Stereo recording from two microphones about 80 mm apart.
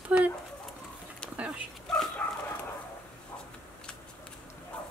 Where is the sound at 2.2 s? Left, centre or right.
Centre.